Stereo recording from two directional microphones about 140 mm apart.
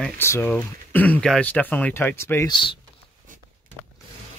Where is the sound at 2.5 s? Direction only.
35° left (ahead or behind).